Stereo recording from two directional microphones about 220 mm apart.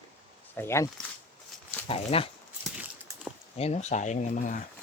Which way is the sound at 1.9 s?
25° left (ahead or behind).